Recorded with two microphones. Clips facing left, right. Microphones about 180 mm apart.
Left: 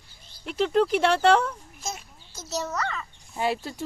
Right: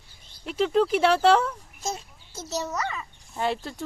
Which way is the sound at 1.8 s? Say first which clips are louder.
Right 4 dB; 35° right (ahead or behind).